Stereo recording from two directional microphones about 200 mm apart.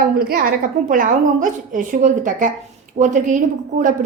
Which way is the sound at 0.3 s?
45° right (ahead or behind).